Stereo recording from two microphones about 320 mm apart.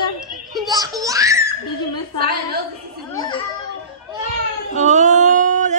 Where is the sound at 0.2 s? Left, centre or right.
Centre.